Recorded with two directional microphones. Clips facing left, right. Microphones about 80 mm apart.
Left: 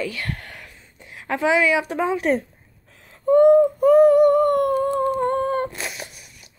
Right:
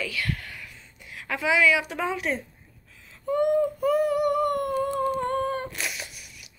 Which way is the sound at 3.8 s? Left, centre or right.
Left.